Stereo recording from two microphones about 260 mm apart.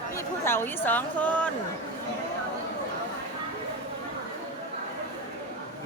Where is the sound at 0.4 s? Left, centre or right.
Centre.